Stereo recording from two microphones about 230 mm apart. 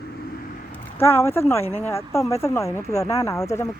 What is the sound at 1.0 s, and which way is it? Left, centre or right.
Speech, centre.